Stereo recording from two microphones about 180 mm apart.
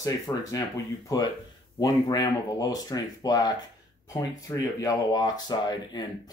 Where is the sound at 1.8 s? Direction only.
20° left (ahead or behind).